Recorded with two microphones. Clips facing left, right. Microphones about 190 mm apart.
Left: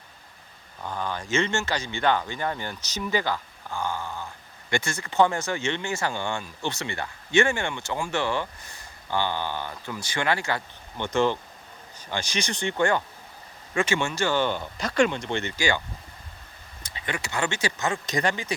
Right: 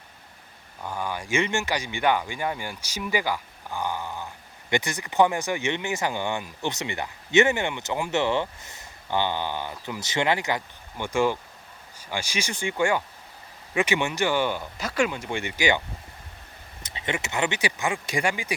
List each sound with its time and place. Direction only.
0.8 s speech: 10° right (ahead or behind)
16.8 s speech: 20° right (ahead or behind)